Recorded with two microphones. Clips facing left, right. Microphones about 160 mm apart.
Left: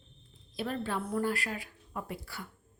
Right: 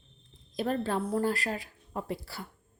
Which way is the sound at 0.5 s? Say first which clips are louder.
Right 4 dB; 45° right (ahead or behind).